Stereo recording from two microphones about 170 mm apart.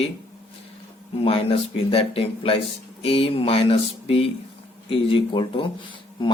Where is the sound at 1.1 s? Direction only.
35° left (ahead or behind).